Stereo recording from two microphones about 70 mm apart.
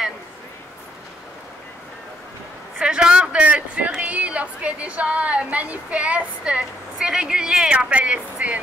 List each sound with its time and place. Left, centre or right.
2.8 s a woman's voice: centre